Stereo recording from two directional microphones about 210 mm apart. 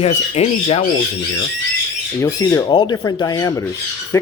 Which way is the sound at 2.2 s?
15° left (ahead or behind).